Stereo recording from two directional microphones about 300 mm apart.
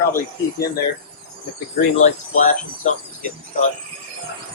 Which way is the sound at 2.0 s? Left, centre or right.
Left.